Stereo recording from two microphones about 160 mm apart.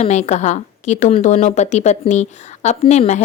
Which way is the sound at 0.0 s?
45° left (ahead or behind).